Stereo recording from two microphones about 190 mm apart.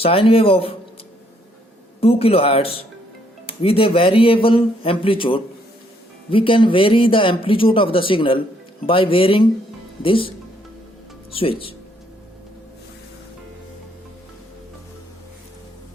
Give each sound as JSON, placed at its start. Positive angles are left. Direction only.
{"t": 0.0, "sound": "speech", "side_deg": 30}
{"t": 2.0, "sound": "speech", "side_deg": 30}